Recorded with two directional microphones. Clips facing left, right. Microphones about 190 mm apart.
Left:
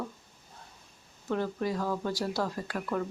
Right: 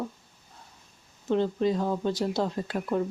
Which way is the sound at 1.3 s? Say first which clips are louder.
Right 6 dB; 20° right (ahead or behind).